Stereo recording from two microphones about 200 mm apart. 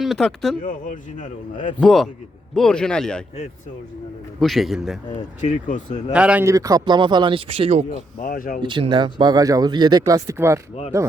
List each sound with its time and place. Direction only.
0.0 s speech: centre (ahead or behind)
0.6 s speech: 40° left (ahead or behind)
1.8 s speech: centre (ahead or behind)
4.4 s speech: centre (ahead or behind)
5.4 s speech: 40° left (ahead or behind)
6.1 s speech: 5° right (ahead or behind); by 7.9 s 30° right (ahead or behind)
8.2 s speech: 45° left (ahead or behind)
8.6 s speech: 25° right (ahead or behind)